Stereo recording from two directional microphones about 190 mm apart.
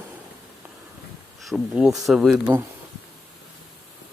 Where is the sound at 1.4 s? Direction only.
Centre (ahead or behind).